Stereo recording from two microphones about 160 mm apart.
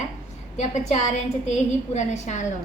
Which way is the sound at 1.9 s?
50° left (ahead or behind).